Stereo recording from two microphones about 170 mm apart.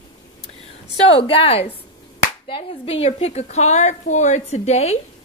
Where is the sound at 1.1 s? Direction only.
35° left (ahead or behind).